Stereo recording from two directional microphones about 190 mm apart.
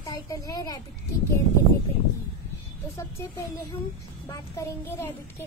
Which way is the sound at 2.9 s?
15° left (ahead or behind).